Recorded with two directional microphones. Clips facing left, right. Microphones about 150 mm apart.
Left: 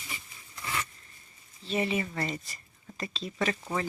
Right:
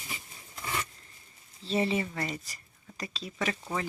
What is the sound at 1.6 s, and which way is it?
Speech, 30° right (ahead or behind).